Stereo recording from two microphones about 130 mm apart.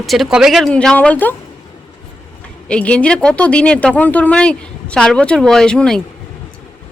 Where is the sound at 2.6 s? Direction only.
10° left (ahead or behind).